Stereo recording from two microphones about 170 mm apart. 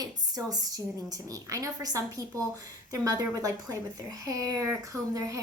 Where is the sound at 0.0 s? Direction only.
20° right (ahead or behind).